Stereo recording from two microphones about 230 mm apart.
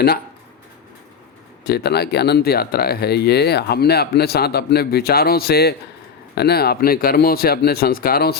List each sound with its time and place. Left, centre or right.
1.6 s speech: left